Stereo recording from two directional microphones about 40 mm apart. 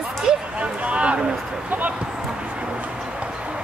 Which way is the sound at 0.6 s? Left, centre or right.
Right.